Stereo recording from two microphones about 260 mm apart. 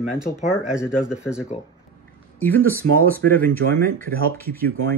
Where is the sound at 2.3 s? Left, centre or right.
Centre.